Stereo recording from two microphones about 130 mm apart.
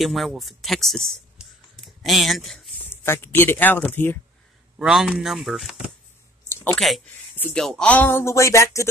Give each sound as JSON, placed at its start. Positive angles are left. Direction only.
{"t": 0.0, "sound": "speech", "side_deg": 0}
{"t": 2.0, "sound": "speech", "side_deg": 0}
{"t": 2.9, "sound": "speech", "side_deg": 20}
{"t": 4.7, "sound": "speech", "side_deg": -5}
{"t": 6.5, "sound": "a sound", "side_deg": 15}
{"t": 7.5, "sound": "speech", "side_deg": 5}